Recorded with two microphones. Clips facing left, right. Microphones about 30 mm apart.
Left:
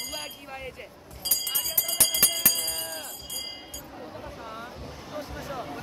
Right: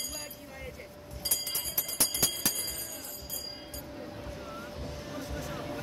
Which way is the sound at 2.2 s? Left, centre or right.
Left.